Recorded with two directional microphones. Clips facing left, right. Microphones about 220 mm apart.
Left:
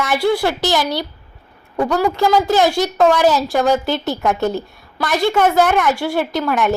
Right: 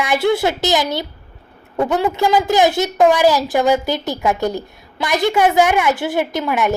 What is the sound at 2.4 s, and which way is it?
A woman's voice, 15° right (ahead or behind).